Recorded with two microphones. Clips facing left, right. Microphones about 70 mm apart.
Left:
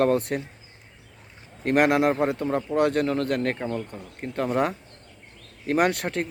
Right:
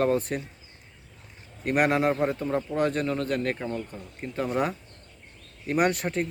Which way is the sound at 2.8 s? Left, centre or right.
Left.